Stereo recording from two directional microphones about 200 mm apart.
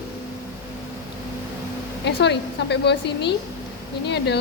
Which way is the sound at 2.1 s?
60° left (ahead or behind).